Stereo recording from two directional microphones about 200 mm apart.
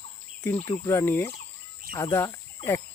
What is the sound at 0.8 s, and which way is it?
Speech, 10° left (ahead or behind).